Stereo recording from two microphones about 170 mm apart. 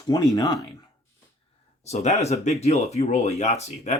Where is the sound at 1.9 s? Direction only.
40° left (ahead or behind).